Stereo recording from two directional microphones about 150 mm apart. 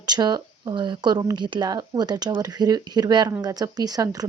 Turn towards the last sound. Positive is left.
turn(degrees=-25)  # may be behind; listen again after turning